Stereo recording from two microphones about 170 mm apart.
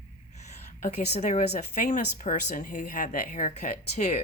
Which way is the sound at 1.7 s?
45° left (ahead or behind).